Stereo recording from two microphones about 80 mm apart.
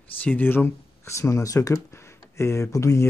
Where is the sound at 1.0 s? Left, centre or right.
Left.